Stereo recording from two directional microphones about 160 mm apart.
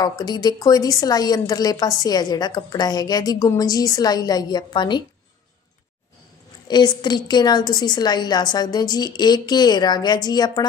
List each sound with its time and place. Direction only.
0.2 s a woman's voice: 25° left (ahead or behind)
6.7 s a woman's voice: 25° left (ahead or behind)